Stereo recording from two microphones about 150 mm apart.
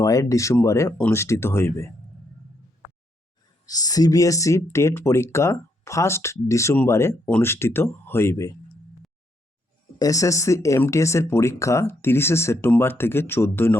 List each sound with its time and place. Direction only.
0.0 s speech: 20° left (ahead or behind)
3.7 s speech: 25° left (ahead or behind)
10.0 s speech: 20° left (ahead or behind)